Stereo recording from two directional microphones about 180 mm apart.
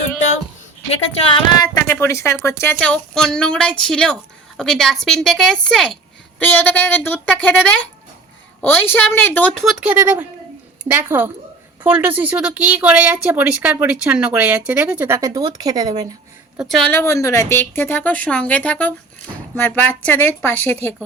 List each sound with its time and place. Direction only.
1.2 s a woman's voice: 25° left (ahead or behind); by 16.0 s 20° right (ahead or behind)
16.6 s speech: 5° left (ahead or behind)
17.0 s a woman's voice: 15° left (ahead or behind)